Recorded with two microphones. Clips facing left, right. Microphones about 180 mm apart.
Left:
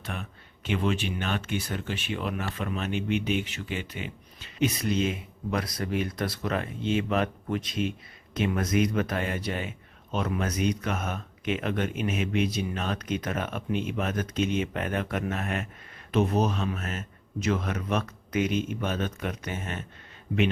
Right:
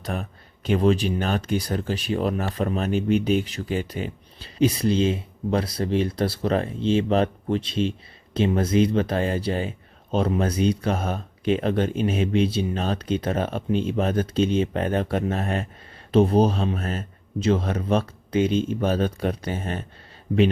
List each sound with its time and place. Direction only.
0.0 s speech: 35° right (ahead or behind)